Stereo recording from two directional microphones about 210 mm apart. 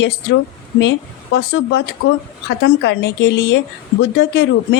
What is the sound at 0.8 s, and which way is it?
A woman's voice, 60° left (ahead or behind).